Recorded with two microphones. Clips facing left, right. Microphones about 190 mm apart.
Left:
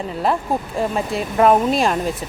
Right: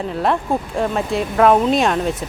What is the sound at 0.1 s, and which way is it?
A woman's voice, centre (ahead or behind).